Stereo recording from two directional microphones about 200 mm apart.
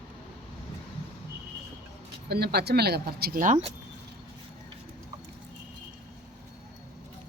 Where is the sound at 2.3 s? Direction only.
55° right (ahead or behind).